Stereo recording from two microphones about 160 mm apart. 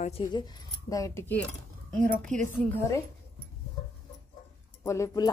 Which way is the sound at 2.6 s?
15° left (ahead or behind).